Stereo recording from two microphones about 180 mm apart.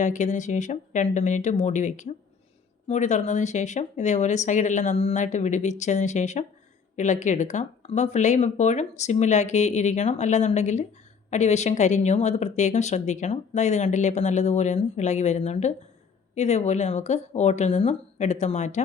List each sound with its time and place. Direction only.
0.0 s speech: 45° left (ahead or behind)